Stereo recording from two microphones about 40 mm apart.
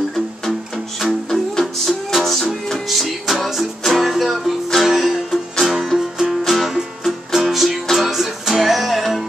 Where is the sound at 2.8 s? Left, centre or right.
Centre.